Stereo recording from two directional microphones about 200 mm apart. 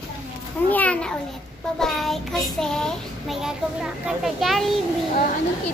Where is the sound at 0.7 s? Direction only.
5° left (ahead or behind).